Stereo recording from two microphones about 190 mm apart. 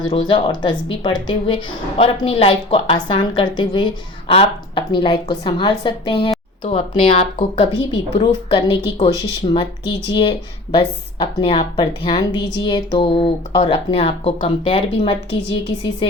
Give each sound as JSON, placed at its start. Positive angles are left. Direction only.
{"t": 0.1, "sound": "a woman's voice", "side_deg": 25}